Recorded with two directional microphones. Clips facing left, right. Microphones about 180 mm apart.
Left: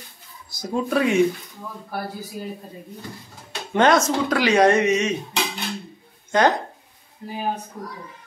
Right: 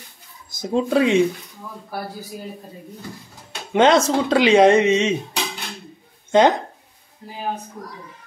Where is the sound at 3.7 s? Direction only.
20° right (ahead or behind).